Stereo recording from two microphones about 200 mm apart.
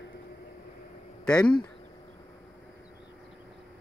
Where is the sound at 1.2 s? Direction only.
5° left (ahead or behind).